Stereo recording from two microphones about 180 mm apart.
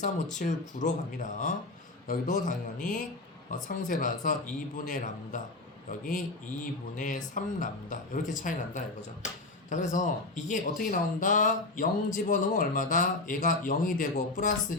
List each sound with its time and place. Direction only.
0.4 s speech: 50° left (ahead or behind)